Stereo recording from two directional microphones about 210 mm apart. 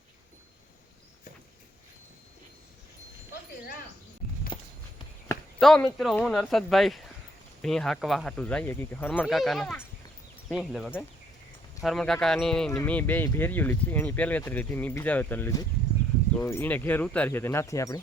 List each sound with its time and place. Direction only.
4.5 s walk: 25° left (ahead or behind)
5.5 s speech: centre (ahead or behind)